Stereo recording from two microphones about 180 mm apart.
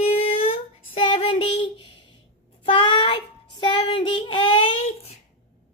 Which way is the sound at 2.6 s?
30° left (ahead or behind).